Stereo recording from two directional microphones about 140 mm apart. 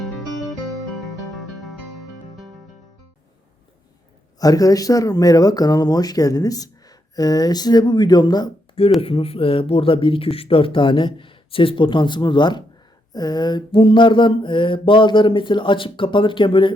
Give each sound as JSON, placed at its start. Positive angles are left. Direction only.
{"t": 0.0, "sound": "guitar", "side_deg": 0}
{"t": 1.3, "sound": "music", "side_deg": 0}
{"t": 4.4, "sound": "speech", "side_deg": 25}
{"t": 9.0, "sound": "speech", "side_deg": 40}